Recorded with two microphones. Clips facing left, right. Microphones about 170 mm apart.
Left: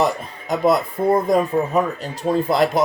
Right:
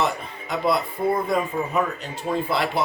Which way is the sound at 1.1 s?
40° left (ahead or behind).